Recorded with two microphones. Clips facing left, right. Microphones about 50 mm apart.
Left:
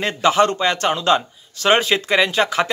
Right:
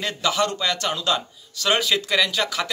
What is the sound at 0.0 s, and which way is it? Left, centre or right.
A man's voice, left.